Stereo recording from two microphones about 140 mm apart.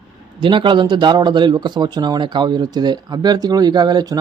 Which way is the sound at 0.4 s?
35° right (ahead or behind).